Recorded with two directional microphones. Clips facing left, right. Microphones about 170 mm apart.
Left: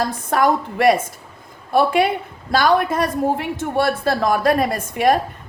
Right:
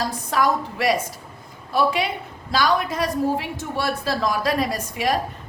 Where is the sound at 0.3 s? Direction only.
55° left (ahead or behind).